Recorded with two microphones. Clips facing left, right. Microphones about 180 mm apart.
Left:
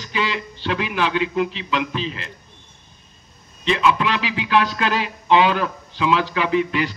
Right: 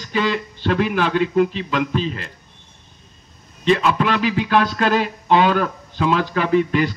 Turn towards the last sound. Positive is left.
turn(degrees=-45)  # may be behind; listen again after turning